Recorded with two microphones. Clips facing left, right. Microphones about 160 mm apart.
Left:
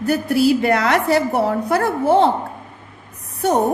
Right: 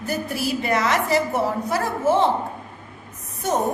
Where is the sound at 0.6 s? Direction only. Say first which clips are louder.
Left 5 dB; 65° left (ahead or behind).